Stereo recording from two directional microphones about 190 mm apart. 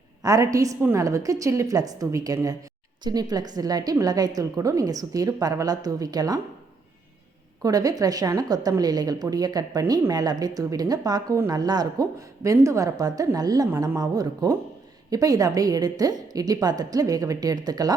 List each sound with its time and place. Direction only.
0.2 s a woman's voice: 20° right (ahead or behind)
7.6 s a woman's voice: 20° right (ahead or behind)